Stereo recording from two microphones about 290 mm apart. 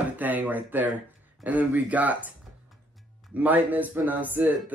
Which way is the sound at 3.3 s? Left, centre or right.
Centre.